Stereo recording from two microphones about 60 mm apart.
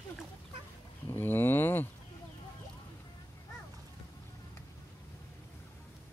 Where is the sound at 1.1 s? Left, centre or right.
Left.